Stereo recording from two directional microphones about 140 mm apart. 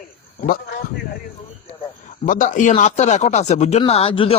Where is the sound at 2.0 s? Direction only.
70° left (ahead or behind).